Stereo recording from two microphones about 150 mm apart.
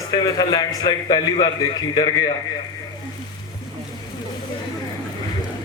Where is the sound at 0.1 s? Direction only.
25° left (ahead or behind).